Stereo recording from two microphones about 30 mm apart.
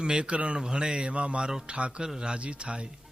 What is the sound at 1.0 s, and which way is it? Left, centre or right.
A man's voice, right.